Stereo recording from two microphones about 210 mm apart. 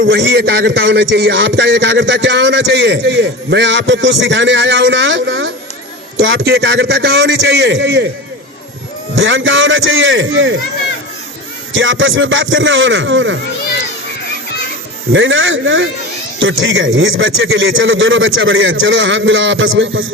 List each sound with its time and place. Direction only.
0.0 s a man's voice: 60° right (ahead or behind)
9.1 s speech: 65° right (ahead or behind)
11.7 s a man's voice: 65° right (ahead or behind)
15.1 s a man's voice: 65° right (ahead or behind)